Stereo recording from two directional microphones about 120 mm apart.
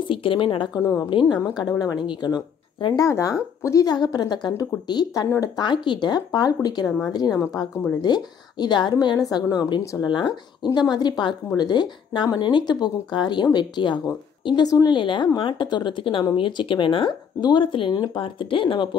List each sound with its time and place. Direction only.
0.0 s speech: 45° left (ahead or behind)